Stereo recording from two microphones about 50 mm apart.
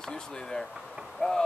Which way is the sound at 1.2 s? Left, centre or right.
Left.